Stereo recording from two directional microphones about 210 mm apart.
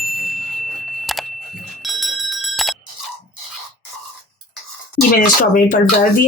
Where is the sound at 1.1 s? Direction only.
Centre (ahead or behind).